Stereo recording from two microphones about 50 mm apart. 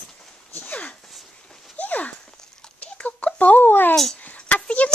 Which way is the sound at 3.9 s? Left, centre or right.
Centre.